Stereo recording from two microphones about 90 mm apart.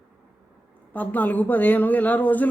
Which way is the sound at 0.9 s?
20° left (ahead or behind).